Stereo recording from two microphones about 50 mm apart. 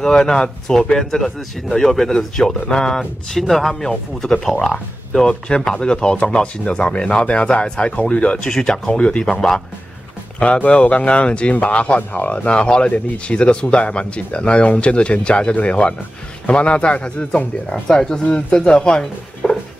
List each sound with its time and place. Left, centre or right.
0.0 s speech: centre
5.2 s speech: centre
9.2 s speech: centre
10.4 s speech: left
12.4 s speech: centre